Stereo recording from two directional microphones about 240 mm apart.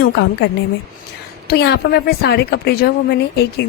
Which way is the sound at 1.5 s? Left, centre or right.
Left.